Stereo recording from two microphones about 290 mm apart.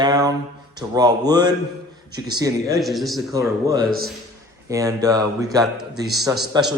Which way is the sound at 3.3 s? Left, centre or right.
Centre.